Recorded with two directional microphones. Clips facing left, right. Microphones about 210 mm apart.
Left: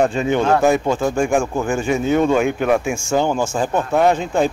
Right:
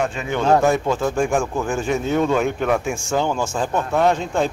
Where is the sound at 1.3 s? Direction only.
15° left (ahead or behind).